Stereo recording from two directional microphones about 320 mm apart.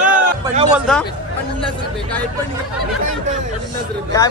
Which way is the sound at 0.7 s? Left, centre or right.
Centre.